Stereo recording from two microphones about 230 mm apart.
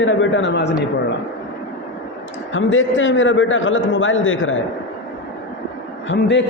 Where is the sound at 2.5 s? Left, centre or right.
Left.